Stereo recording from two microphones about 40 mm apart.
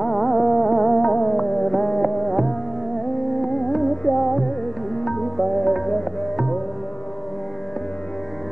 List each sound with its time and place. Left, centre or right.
0.2 s music: centre
1.0 s music: left
2.2 s music: centre
3.3 s music: centre
5.2 s music: centre
5.7 s tabla: centre